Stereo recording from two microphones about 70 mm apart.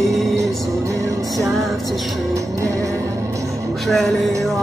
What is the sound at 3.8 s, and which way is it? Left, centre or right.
Music, centre.